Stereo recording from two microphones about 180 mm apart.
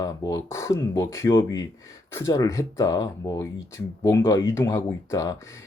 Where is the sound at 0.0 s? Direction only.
15° left (ahead or behind).